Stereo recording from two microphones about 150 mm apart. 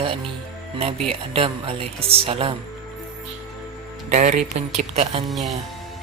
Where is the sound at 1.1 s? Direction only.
40° right (ahead or behind).